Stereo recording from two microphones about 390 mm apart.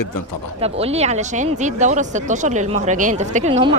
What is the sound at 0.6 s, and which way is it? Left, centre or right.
Speech, centre.